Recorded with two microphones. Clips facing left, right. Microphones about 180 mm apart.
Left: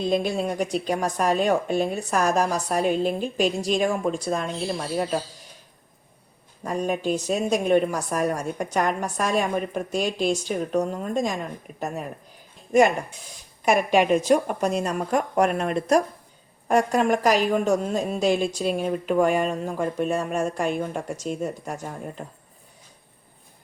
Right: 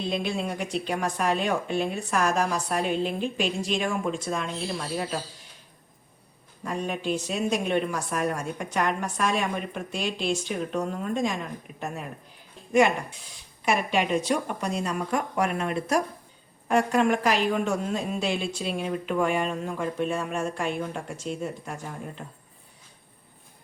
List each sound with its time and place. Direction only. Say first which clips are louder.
0.0 s speech: left 5 dB; 40° left (ahead or behind)
6.6 s speech: left 5 dB; 40° left (ahead or behind)
13.7 s a woman's voice: left 6 dB; 45° left (ahead or behind)